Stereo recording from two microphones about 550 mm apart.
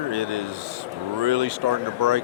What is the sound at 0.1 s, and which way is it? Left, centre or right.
Speech, right.